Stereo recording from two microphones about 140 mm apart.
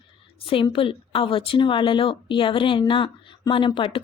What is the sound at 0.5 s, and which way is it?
A woman's voice, 40° left (ahead or behind).